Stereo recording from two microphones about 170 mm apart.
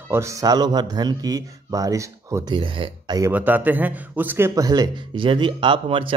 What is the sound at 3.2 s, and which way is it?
A man's voice, 10° right (ahead or behind).